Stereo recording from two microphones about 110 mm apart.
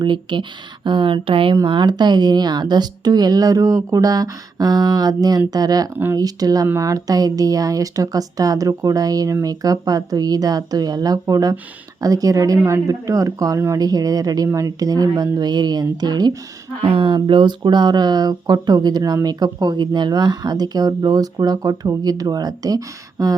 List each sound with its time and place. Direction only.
0.0 s speech: 45° right (ahead or behind)
16.8 s speech: 50° right (ahead or behind); by 23.3 s 35° right (ahead or behind)